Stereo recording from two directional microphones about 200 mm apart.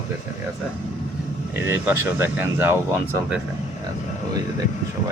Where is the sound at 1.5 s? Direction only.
10° right (ahead or behind).